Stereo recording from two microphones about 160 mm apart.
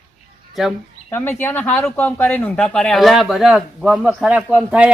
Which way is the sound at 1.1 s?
10° left (ahead or behind).